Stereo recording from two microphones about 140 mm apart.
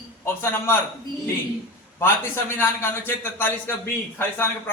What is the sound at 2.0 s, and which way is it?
A man's voice, 15° left (ahead or behind).